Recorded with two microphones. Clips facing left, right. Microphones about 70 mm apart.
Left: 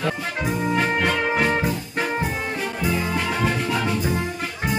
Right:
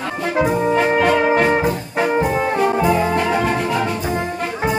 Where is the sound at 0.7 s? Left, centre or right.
Centre.